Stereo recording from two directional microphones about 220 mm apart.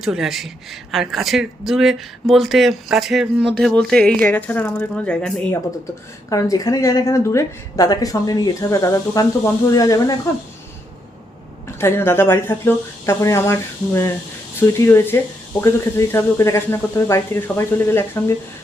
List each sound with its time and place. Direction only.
0.0 s speech: centre (ahead or behind)
6.3 s a woman's voice: 15° left (ahead or behind)
11.8 s a woman's voice: 10° left (ahead or behind)